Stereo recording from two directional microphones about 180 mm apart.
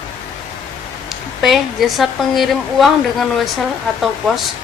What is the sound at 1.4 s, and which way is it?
A woman's voice, centre (ahead or behind).